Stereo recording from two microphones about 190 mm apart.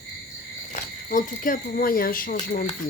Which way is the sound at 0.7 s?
45° left (ahead or behind).